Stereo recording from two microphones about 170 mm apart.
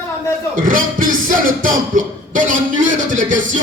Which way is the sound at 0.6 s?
55° right (ahead or behind).